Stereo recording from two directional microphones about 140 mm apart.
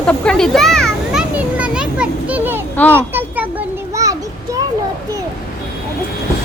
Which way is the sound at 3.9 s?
25° right (ahead or behind).